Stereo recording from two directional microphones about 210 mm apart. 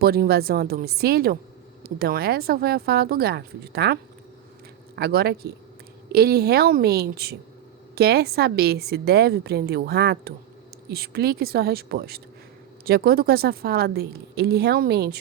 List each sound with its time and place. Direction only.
0.0 s a woman's voice: 45° right (ahead or behind)
4.9 s a woman's voice: 50° right (ahead or behind)